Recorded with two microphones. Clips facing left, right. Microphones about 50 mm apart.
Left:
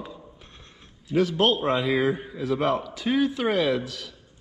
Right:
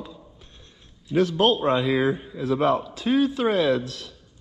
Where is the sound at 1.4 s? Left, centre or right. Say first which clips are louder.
Right 2 dB; left.